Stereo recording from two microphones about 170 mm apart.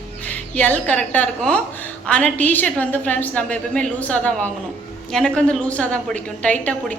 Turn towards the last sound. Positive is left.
turn(degrees=10)  # may be behind; listen again after turning